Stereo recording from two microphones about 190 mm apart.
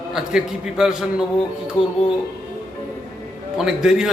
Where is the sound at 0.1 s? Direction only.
5° right (ahead or behind).